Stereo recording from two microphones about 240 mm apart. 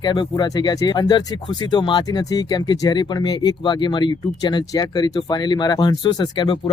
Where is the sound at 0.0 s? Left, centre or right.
Centre.